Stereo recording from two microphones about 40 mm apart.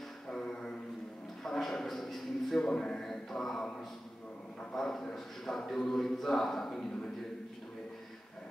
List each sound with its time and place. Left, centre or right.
0.3 s music: centre
1.4 s speech: centre
2.7 s a man's voice: left
3.0 s mantra: centre
4.7 s speech: centre